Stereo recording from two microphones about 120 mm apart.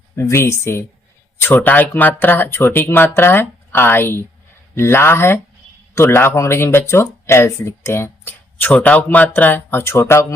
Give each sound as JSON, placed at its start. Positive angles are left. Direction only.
{"t": 0.2, "sound": "speech", "side_deg": 20}